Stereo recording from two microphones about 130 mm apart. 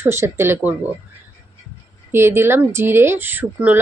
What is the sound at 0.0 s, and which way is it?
Speech, 20° right (ahead or behind).